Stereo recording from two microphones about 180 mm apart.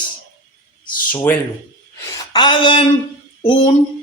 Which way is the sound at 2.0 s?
20° left (ahead or behind).